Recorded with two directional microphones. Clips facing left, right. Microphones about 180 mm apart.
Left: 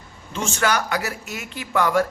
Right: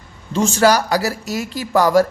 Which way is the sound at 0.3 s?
35° right (ahead or behind).